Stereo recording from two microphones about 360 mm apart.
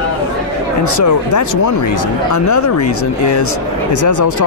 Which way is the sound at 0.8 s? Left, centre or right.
Left.